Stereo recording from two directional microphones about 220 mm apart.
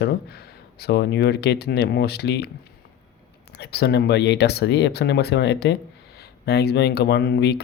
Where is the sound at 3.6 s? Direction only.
45° left (ahead or behind).